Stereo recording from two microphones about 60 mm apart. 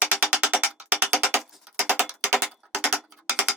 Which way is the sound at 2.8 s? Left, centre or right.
Right.